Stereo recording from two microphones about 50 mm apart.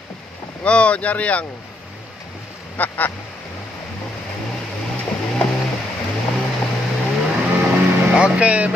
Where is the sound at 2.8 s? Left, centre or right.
Left.